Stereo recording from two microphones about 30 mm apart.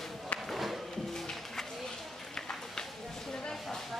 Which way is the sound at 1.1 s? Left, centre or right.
Centre.